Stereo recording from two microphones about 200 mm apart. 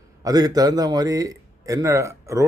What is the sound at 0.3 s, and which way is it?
A man's voice, 20° right (ahead or behind).